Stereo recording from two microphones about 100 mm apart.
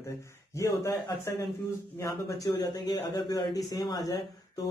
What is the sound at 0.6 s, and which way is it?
Speech, 30° left (ahead or behind).